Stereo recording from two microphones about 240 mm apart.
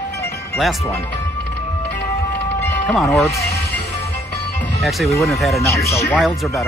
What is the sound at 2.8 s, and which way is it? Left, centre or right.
Speech, centre.